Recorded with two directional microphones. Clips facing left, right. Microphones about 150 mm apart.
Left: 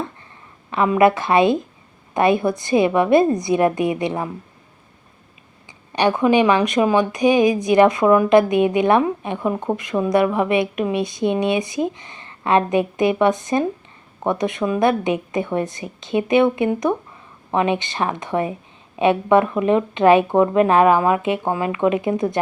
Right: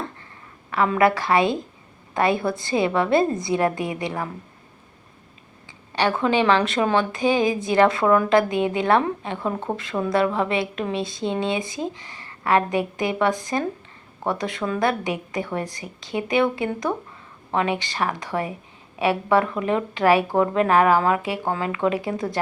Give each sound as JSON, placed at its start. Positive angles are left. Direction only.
{"t": 0.7, "sound": "speech", "side_deg": 20}
{"t": 5.9, "sound": "a woman's voice", "side_deg": 20}